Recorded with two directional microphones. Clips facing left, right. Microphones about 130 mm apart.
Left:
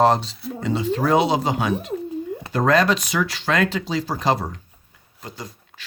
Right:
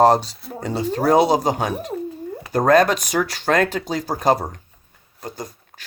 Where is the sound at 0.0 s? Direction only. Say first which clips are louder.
Right 3 dB; 40° right (ahead or behind).